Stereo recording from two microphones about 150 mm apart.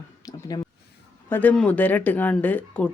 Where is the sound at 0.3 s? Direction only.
25° left (ahead or behind).